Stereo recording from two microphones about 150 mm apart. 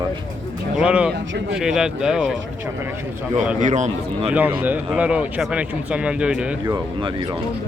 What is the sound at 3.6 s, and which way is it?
Speech, 55° right (ahead or behind).